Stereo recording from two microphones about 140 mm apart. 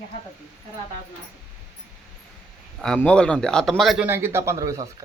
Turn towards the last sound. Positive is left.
turn(degrees=-25)  # may be behind; listen again after turning